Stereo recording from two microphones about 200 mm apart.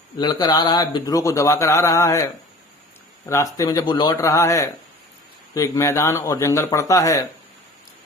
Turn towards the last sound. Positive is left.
turn(degrees=15)  # may be behind; listen again after turning